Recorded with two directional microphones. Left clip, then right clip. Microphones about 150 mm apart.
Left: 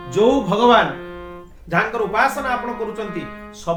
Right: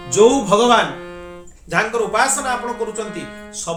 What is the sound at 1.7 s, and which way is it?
Speech, 10° right (ahead or behind).